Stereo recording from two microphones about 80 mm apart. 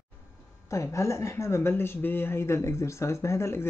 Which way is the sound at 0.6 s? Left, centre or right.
Left.